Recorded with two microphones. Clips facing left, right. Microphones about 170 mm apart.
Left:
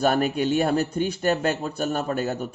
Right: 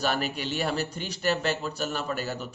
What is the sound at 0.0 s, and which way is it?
Speech, 50° left (ahead or behind).